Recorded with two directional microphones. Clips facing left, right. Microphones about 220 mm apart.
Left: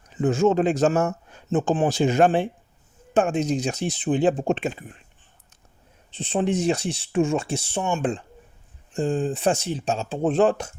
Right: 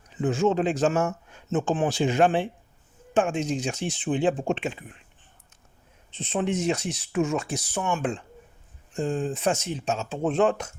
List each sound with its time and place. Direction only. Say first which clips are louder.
0.2 s speech: left 3 dB; 45° left (ahead or behind)
6.1 s speech: left 3 dB; 30° left (ahead or behind)